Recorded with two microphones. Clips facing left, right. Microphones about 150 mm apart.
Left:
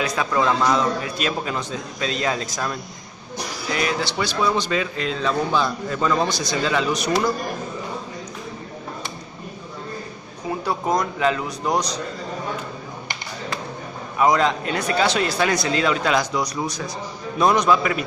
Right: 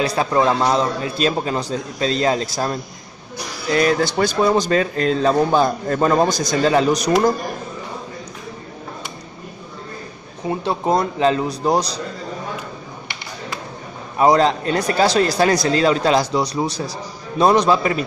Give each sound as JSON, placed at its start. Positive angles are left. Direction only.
{"t": 0.0, "sound": "speech", "side_deg": -35}
{"t": 3.7, "sound": "speech", "side_deg": -45}
{"t": 10.6, "sound": "speech", "side_deg": -25}
{"t": 14.1, "sound": "speech", "side_deg": -35}